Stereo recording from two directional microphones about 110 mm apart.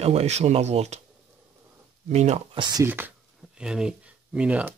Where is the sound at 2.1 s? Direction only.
90° right.